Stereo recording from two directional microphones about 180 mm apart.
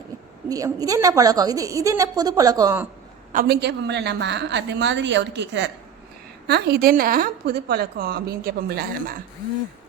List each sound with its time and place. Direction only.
0.4 s a woman's voice: 20° right (ahead or behind)
3.3 s a woman's voice: 60° right (ahead or behind); by 5.7 s 80° right
6.5 s a woman's voice: 60° right (ahead or behind)